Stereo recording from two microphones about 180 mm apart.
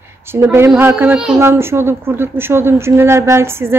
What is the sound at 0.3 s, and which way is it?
A woman's voice, 15° right (ahead or behind).